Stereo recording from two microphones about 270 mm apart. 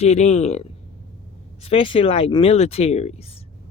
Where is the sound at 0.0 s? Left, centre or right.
Left.